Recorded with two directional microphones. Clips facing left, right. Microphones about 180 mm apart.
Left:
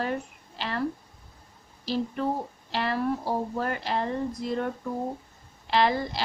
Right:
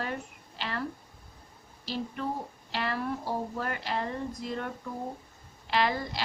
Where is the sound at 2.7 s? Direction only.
35° left (ahead or behind).